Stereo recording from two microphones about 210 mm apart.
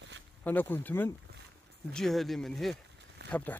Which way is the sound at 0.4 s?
10° left (ahead or behind).